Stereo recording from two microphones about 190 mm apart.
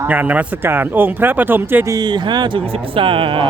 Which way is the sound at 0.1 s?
10° right (ahead or behind).